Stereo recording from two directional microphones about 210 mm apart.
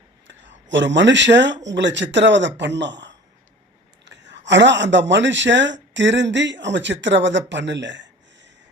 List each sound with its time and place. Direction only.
0.3 s speech: 60° right (ahead or behind)